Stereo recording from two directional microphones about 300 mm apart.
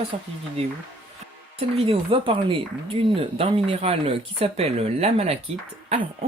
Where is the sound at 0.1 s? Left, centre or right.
Right.